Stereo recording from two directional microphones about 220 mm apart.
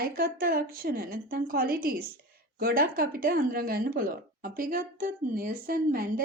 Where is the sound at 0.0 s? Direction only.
45° right (ahead or behind).